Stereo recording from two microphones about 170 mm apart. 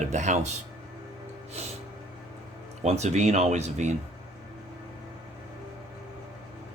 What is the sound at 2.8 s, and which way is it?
Speech, 40° right (ahead or behind).